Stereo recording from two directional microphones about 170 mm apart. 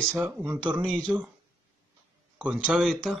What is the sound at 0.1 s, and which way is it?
Speech, 10° right (ahead or behind).